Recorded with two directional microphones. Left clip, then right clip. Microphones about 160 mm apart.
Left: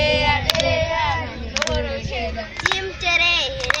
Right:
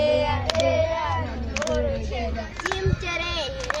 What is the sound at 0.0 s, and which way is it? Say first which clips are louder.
Child singing: left 4 dB; 30° right (ahead or behind).